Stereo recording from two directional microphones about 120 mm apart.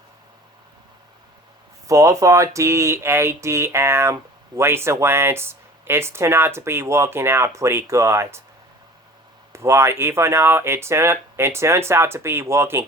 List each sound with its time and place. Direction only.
1.9 s speech: 25° right (ahead or behind)
9.5 s speech: 25° right (ahead or behind)